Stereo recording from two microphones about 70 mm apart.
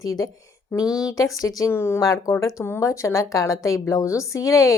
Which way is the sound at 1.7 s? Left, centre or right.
Left.